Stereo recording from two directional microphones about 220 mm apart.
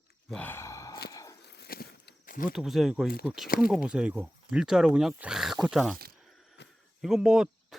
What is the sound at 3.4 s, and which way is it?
Speech, 40° left (ahead or behind).